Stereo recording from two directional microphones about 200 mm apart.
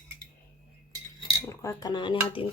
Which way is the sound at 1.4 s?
15° left (ahead or behind).